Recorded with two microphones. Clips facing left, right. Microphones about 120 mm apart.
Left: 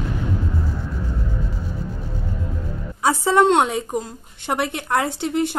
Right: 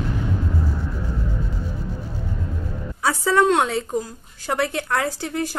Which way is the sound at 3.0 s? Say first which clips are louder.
Left 2 dB; 25° left (ahead or behind).